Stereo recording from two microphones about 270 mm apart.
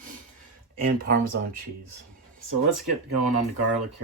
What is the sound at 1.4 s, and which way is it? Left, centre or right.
Speech, right.